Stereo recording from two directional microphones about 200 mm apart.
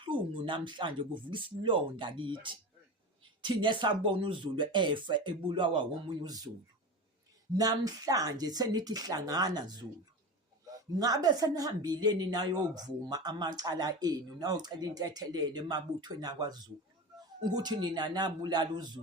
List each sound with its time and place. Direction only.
0.0 s a woman's voice: 25° right (ahead or behind)
7.5 s a woman's voice: 20° right (ahead or behind)
10.9 s a woman's voice: 20° right (ahead or behind)